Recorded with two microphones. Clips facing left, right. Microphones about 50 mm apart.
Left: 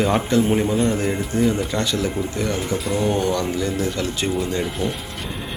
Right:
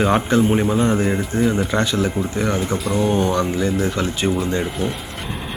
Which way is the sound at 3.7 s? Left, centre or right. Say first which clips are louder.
Right 3 dB; centre.